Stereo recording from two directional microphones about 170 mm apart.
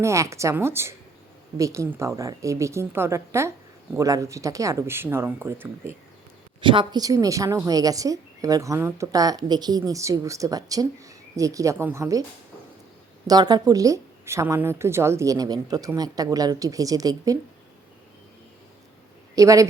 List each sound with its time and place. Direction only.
0.0 s speech: 15° right (ahead or behind)
6.6 s a woman's voice: 30° right (ahead or behind)
13.2 s a woman's voice: 25° right (ahead or behind)
19.4 s a woman's voice: 20° right (ahead or behind)